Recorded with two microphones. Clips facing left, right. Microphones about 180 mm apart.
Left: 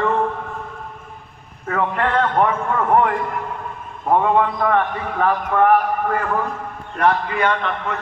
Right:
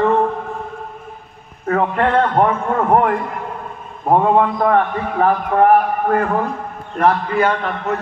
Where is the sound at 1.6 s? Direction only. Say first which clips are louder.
Right 4 dB; 35° right (ahead or behind).